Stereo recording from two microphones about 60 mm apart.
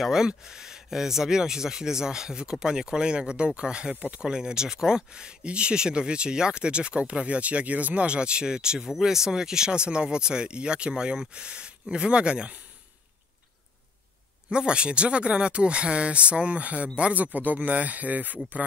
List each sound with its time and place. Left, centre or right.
0.0 s speech: centre
14.5 s speech: centre